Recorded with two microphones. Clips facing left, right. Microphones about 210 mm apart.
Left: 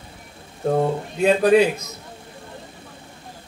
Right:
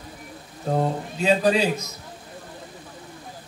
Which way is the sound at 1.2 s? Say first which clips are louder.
Left 5 dB; 55° left (ahead or behind).